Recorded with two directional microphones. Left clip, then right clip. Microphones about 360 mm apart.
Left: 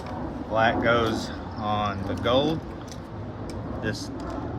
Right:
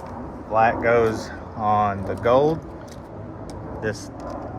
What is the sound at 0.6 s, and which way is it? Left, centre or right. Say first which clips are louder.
Speech: right 4 dB; centre.